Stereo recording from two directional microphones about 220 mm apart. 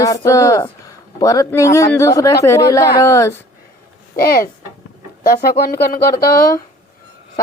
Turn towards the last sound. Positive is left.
turn(degrees=45)  # may be behind; listen again after turning